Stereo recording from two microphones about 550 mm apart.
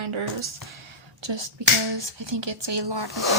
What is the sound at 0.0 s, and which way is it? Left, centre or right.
Speech, right.